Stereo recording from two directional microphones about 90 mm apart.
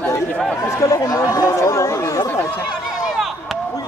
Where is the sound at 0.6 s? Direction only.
35° left (ahead or behind).